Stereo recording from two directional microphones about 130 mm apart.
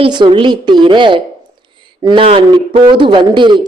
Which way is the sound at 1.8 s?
35° right (ahead or behind).